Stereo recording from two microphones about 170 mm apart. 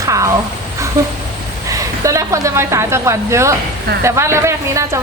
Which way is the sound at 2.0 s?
20° right (ahead or behind).